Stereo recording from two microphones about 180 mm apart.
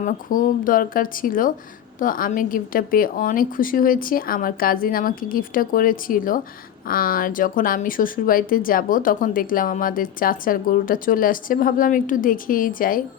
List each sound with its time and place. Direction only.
0.0 s speech: 50° left (ahead or behind)